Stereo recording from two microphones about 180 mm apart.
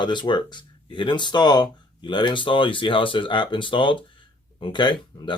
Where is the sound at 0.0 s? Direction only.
25° left (ahead or behind).